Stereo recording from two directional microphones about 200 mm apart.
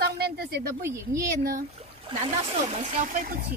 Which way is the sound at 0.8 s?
15° right (ahead or behind).